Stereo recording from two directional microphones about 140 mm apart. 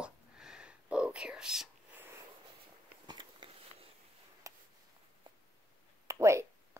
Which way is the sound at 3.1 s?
35° right (ahead or behind).